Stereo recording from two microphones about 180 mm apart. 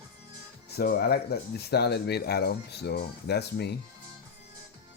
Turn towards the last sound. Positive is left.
turn(degrees=65)  # may be behind; listen again after turning